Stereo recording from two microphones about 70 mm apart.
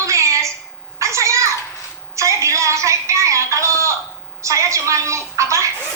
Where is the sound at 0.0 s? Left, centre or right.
Right.